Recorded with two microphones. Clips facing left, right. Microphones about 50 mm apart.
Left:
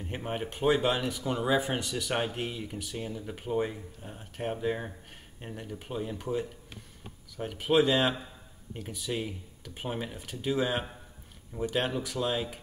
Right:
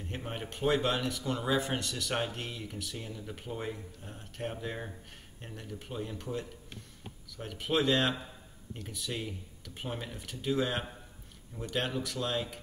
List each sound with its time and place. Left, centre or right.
0.0 s speech: centre